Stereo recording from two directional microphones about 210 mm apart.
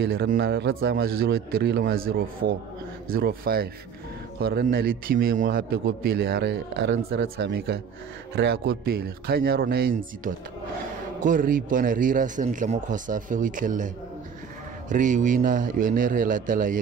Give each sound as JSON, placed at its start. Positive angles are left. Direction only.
{"t": 0.0, "sound": "a man's voice", "side_deg": -50}